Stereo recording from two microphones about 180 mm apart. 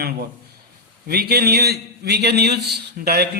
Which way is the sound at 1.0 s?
60° right (ahead or behind).